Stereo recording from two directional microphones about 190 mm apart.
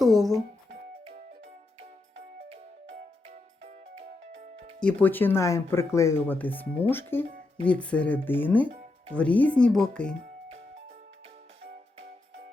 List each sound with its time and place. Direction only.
0.0 s speech: centre (ahead or behind)
3.2 s music: 35° right (ahead or behind)
4.8 s speech: 5° left (ahead or behind)